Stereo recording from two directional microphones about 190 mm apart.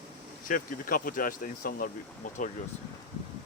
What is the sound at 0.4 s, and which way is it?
Speech, 45° left (ahead or behind).